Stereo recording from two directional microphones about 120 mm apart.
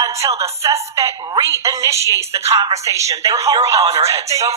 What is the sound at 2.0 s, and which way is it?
Speech, 30° left (ahead or behind).